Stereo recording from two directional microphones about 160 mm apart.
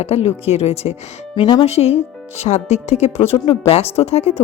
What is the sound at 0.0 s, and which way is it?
Speech, 40° left (ahead or behind).